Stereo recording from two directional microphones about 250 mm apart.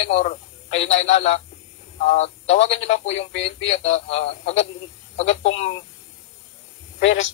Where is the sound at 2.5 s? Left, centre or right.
Left.